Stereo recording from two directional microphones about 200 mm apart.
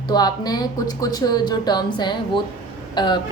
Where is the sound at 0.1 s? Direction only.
20° left (ahead or behind).